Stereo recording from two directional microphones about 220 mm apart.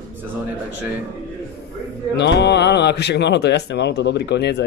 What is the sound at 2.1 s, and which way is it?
Speech, 50° left (ahead or behind).